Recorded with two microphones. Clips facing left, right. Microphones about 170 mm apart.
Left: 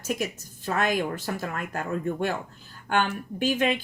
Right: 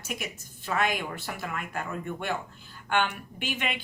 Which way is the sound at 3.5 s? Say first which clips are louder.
Left 8 dB; 40° left (ahead or behind).